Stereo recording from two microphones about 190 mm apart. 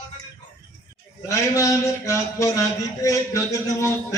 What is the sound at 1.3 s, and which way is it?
A man's voice, 15° left (ahead or behind).